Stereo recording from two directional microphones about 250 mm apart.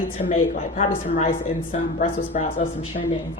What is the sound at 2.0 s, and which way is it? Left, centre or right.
Speech, left.